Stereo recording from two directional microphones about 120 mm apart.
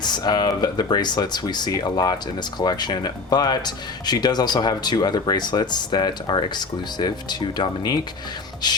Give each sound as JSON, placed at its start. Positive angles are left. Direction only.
{"t": 0.0, "sound": "speech", "side_deg": 35}